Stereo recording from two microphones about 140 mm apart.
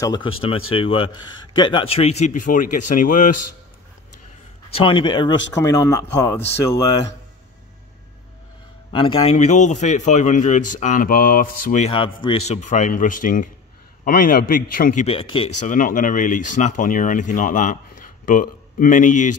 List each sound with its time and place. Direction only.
0.0 s speech: 35° left (ahead or behind); by 3.3 s 70° left (ahead or behind)
4.7 s speech: 35° left (ahead or behind)
8.9 s a man's voice: 40° left (ahead or behind); by 11.8 s 85° left
11.8 s speech: 40° left (ahead or behind)
12.4 s speech: 60° left (ahead or behind); by 15.0 s 85° left
15.0 s speech: 40° left (ahead or behind)
15.6 s speech: 70° left (ahead or behind)